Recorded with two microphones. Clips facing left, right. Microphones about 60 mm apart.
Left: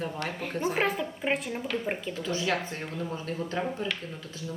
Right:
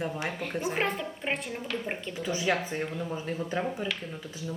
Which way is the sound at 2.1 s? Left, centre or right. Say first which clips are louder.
Right 3 dB; centre.